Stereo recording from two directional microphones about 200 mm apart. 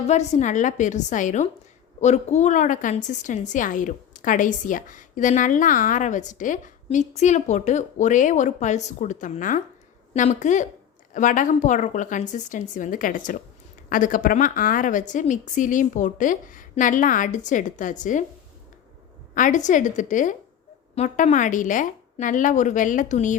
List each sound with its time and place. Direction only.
0.1 s a woman's voice: 35° left (ahead or behind)
19.3 s a woman's voice: 40° left (ahead or behind)